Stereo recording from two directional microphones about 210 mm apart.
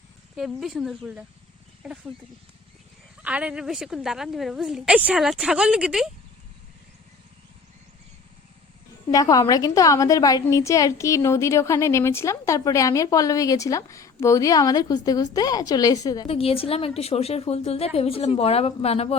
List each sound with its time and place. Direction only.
0.3 s a woman's voice: centre (ahead or behind)
3.2 s a woman's voice: 5° right (ahead or behind)
9.1 s a woman's voice: 15° left (ahead or behind)